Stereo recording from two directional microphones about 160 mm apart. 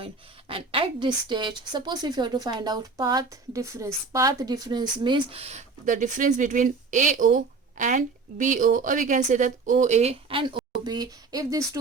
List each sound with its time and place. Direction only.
0.0 s a woman's voice: 35° right (ahead or behind)